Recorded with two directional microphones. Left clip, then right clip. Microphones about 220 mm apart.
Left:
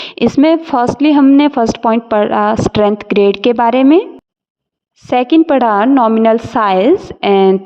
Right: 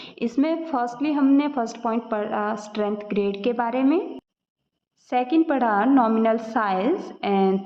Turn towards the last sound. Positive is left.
turn(degrees=45)  # may be behind; listen again after turning